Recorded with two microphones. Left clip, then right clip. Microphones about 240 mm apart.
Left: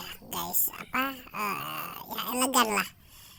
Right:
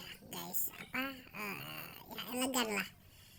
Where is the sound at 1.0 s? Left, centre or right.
Left.